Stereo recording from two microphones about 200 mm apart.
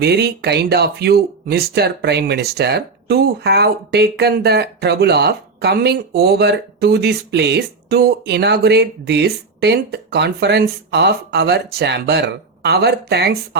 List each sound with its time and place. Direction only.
0.0 s speech: 55° right (ahead or behind)